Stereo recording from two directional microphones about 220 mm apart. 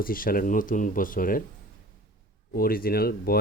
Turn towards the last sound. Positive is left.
turn(degrees=45)  # may be behind; listen again after turning